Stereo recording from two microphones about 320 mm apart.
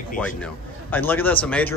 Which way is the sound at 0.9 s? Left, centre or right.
Centre.